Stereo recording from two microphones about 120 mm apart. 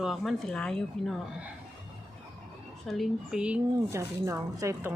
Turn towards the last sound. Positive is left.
turn(degrees=-25)  # may be behind; listen again after turning